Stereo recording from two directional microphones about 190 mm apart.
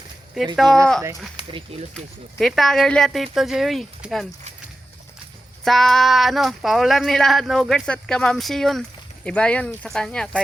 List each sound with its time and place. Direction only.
0.5 s speech: centre (ahead or behind)
2.4 s speech: centre (ahead or behind)
5.6 s speech: centre (ahead or behind)